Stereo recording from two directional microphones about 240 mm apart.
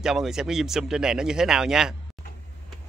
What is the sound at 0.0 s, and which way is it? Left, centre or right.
A man's voice, centre.